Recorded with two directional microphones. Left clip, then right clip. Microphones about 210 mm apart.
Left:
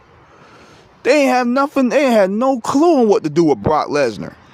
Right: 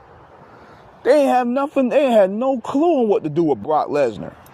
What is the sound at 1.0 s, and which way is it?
Speech, 30° left (ahead or behind).